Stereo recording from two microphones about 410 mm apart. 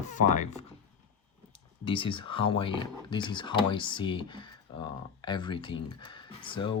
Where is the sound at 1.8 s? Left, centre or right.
Centre.